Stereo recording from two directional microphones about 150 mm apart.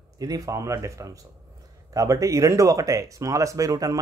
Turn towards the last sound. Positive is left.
turn(degrees=-25)  # may be behind; listen again after turning